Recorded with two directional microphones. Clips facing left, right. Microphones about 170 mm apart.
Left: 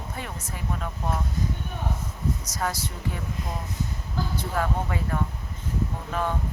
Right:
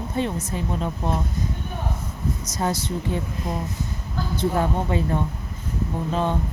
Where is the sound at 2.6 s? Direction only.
25° right (ahead or behind).